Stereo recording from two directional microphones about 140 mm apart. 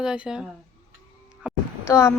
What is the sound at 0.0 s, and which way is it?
Speech, 5° right (ahead or behind).